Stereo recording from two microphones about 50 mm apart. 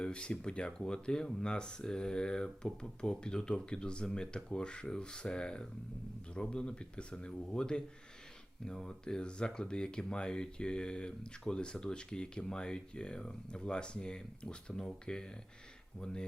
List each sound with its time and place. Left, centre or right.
0.0 s speech: left